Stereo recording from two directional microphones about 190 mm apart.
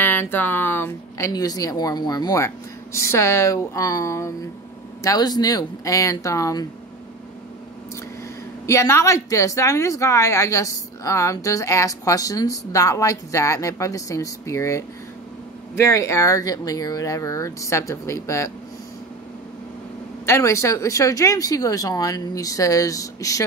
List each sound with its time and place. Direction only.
0.0 s a woman's voice: 10° left (ahead or behind)
8.6 s a woman's voice: 15° left (ahead or behind)
20.2 s a woman's voice: 15° left (ahead or behind)